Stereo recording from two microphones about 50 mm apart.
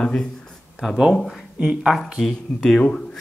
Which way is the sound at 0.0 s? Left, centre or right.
Centre.